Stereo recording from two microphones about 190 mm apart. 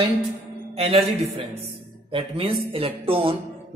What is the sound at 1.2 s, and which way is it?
A man's voice, 30° right (ahead or behind).